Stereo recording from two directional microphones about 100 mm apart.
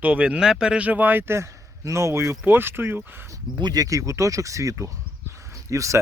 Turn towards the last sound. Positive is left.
turn(degrees=-30)  # may be behind; listen again after turning